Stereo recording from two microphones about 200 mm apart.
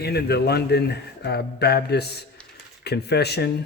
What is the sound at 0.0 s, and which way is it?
Speech, 55° left (ahead or behind).